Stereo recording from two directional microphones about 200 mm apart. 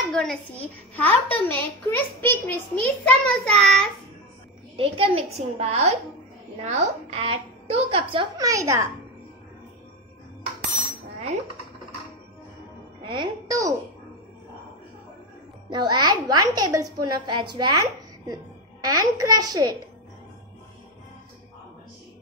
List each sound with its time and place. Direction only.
0.1 s a woman's voice: 5° left (ahead or behind)
4.7 s a child's voice: 25° right (ahead or behind)
13.0 s a woman's voice: 25° right (ahead or behind)
15.7 s a child's voice: 20° right (ahead or behind)